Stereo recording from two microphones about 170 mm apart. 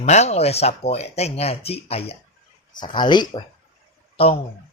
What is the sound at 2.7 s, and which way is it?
Speech, 25° left (ahead or behind).